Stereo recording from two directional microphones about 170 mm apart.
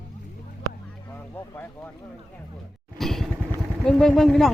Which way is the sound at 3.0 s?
Centre (ahead or behind).